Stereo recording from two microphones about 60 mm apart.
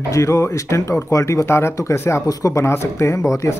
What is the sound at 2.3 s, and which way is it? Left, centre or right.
Speech, left.